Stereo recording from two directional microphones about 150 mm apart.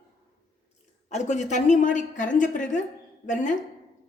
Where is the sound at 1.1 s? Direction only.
50° left (ahead or behind).